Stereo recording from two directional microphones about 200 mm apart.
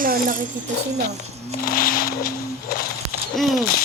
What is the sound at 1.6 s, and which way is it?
Music, 45° left (ahead or behind).